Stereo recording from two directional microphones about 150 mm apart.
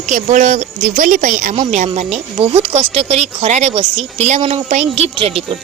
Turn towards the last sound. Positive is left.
turn(degrees=-50)  # may be behind; listen again after turning